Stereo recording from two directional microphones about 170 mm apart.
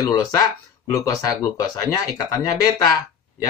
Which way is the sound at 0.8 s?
20° left (ahead or behind).